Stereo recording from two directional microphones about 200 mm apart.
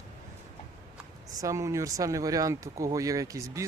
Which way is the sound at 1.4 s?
15° right (ahead or behind).